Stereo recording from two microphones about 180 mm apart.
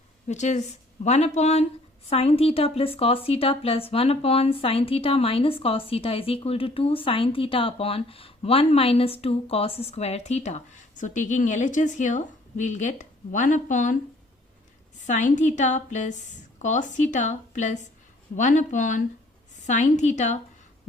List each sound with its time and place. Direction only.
0.3 s a woman's voice: 40° left (ahead or behind)
15.0 s a woman's voice: 40° left (ahead or behind)